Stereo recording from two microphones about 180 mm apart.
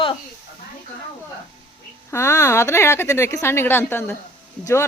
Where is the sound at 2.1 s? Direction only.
15° left (ahead or behind).